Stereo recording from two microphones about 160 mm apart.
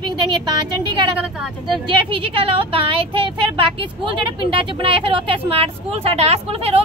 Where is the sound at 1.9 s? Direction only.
35° right (ahead or behind).